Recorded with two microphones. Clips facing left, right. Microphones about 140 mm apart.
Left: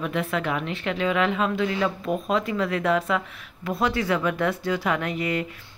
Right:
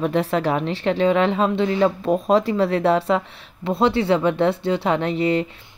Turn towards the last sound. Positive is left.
turn(degrees=-30)  # may be behind; listen again after turning